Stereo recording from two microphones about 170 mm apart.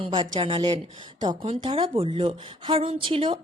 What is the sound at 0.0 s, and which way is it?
Speech, 30° right (ahead or behind).